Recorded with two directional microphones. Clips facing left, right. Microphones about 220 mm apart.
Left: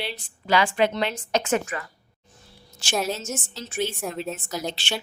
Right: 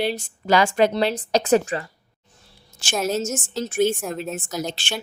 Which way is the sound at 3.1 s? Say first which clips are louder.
Right 7 dB; 45° right (ahead or behind).